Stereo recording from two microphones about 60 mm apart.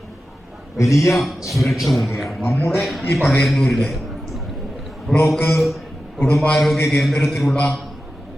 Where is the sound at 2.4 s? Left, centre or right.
Left.